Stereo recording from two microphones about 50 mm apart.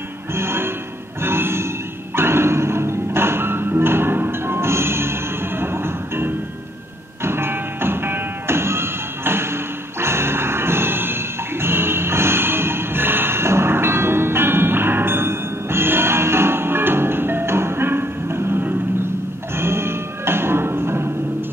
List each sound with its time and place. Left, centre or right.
0.3 s music: right